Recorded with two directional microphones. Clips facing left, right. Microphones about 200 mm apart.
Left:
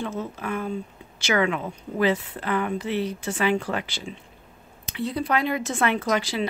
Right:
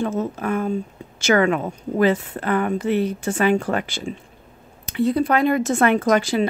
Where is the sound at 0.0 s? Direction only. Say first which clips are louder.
Right 7 dB; 45° right (ahead or behind).